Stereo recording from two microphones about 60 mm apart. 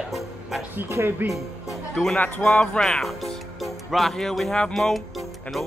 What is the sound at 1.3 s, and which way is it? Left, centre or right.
Speech, centre.